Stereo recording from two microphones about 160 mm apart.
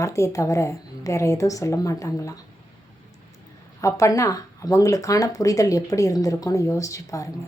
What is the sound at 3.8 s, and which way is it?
Speech, 20° left (ahead or behind).